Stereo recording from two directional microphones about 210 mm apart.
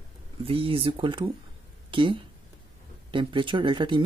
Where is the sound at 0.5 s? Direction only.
25° right (ahead or behind).